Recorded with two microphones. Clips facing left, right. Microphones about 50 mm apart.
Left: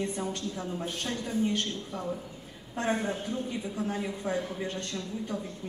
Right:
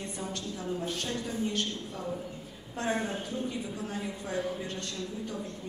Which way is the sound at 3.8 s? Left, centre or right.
Centre.